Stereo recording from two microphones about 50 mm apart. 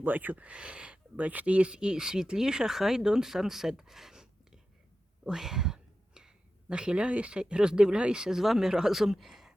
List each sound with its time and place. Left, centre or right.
0.0 s speech: right
8.2 s speech: centre